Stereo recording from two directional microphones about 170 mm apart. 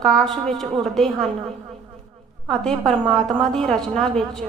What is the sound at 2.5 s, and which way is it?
A woman's voice, 5° left (ahead or behind).